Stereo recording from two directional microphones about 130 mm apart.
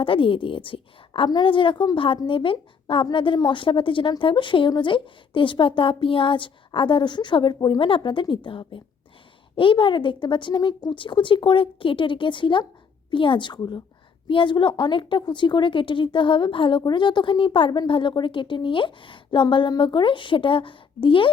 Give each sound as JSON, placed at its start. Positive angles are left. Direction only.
{"t": 0.0, "sound": "a woman's voice", "side_deg": 45}